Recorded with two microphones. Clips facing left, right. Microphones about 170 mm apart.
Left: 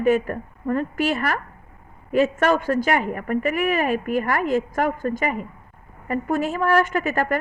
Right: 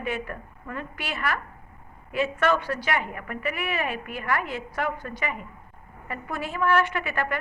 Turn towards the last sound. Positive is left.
turn(degrees=40)  # may be behind; listen again after turning